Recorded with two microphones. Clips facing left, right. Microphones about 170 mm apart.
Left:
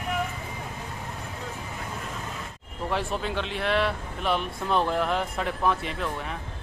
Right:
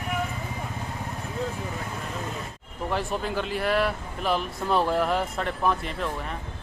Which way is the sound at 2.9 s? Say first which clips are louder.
Right 1 dB; centre (ahead or behind).